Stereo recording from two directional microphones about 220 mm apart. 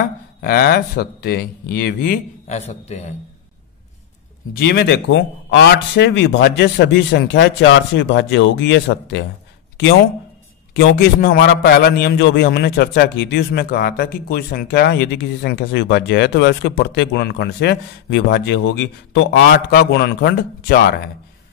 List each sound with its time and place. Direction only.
0.4 s a man's voice: 45° left (ahead or behind)
4.6 s speech: 50° left (ahead or behind)
10.7 s a man's voice: 45° left (ahead or behind)